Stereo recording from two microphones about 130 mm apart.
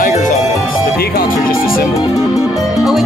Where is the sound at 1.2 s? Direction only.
90° left.